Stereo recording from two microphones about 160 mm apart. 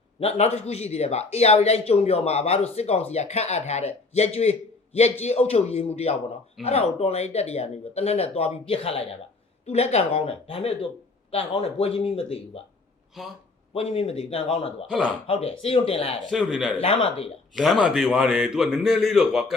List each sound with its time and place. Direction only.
0.2 s speech: 40° left (ahead or behind)
13.2 s a man's voice: centre (ahead or behind)
13.7 s speech: 35° left (ahead or behind)
14.8 s a man's voice: centre (ahead or behind)
15.3 s speech: 35° left (ahead or behind)
16.3 s a man's voice: centre (ahead or behind)
16.8 s speech: 35° left (ahead or behind)
17.5 s a man's voice: centre (ahead or behind)